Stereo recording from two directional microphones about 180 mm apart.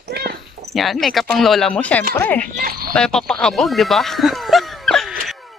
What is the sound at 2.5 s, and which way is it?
Speech, 55° right (ahead or behind).